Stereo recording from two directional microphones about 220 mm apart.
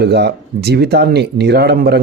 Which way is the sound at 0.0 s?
50° right (ahead or behind).